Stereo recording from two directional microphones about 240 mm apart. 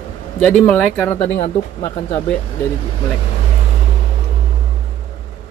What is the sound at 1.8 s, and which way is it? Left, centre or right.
Speech, centre.